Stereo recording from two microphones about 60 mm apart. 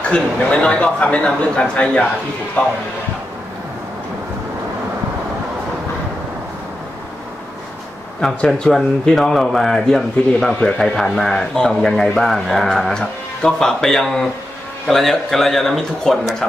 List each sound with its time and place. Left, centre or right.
0.1 s a man's voice: centre
8.2 s speech: centre